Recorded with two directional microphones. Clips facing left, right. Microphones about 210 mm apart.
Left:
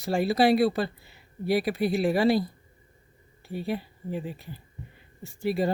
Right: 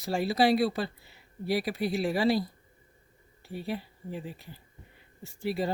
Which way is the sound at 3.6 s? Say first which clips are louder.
Left 4 dB; 55° left (ahead or behind).